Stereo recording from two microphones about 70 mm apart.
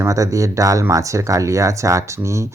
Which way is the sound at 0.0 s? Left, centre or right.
Right.